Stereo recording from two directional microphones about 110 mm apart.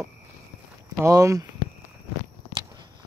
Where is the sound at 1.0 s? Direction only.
30° right (ahead or behind).